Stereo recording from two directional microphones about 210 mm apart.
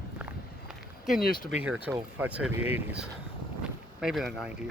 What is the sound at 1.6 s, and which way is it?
Speech, 5° right (ahead or behind).